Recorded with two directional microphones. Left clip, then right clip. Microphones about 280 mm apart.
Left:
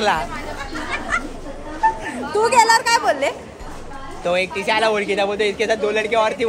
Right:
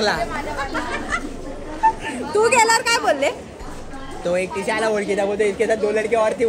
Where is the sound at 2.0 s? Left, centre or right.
Centre.